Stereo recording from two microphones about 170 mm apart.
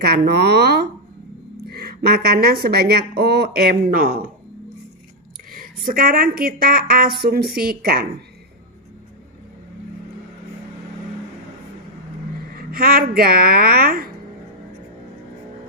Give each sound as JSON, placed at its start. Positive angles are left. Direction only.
{"t": 0.0, "sound": "speech", "side_deg": -70}
{"t": 5.5, "sound": "a sound", "side_deg": -55}
{"t": 5.9, "sound": "a woman's voice", "side_deg": -60}
{"t": 12.5, "sound": "a woman's voice", "side_deg": -60}